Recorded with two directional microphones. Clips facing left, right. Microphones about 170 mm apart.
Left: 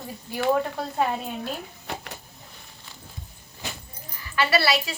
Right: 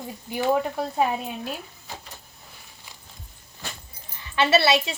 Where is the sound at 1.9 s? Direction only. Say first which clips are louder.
Left 6 dB; 65° left (ahead or behind).